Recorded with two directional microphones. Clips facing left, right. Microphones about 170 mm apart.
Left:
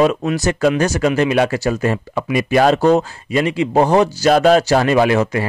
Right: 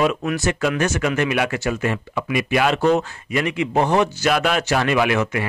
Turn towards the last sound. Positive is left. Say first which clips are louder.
# left 5 dB
turn(degrees=35)  # may be behind; listen again after turning